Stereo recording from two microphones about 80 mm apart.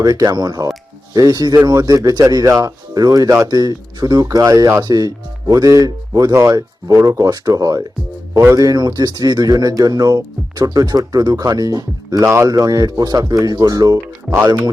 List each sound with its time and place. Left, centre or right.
0.0 s speech: right
8.3 s speech: right
8.6 s speech: right